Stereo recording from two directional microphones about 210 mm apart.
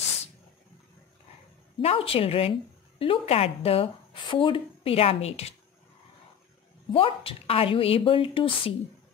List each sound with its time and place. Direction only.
1.8 s a woman's voice: 30° left (ahead or behind)
6.9 s a woman's voice: 25° left (ahead or behind)